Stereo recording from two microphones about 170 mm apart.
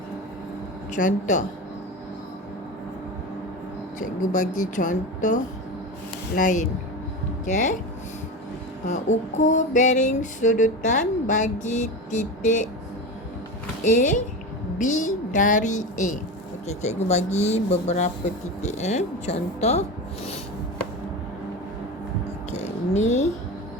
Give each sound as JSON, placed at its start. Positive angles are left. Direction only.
{"t": 0.9, "sound": "speech", "side_deg": 50}
{"t": 4.0, "sound": "speech", "side_deg": 50}
{"t": 9.4, "sound": "speech", "side_deg": 50}
{"t": 13.8, "sound": "speech", "side_deg": 45}
{"t": 22.5, "sound": "a sound", "side_deg": 40}